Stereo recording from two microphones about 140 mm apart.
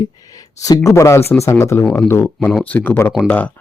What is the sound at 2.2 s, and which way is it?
Speech, centre (ahead or behind).